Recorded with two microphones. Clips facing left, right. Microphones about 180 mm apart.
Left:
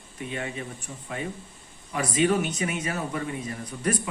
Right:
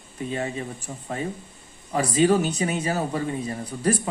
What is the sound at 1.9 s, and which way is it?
Speech, 35° right (ahead or behind).